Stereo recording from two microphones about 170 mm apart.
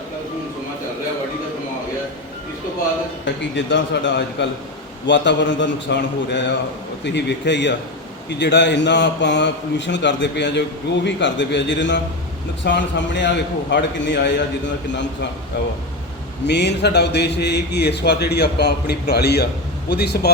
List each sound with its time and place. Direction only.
3.5 s a man's voice: 90° left
16.5 s a man's voice: 80° left